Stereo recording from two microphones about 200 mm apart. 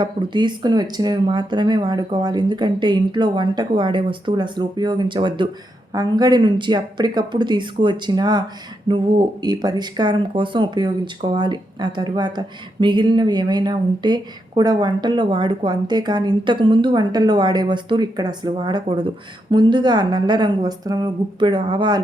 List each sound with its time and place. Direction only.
0.0 s speech: 20° right (ahead or behind)